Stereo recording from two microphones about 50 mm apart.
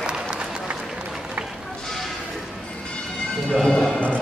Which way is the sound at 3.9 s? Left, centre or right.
Left.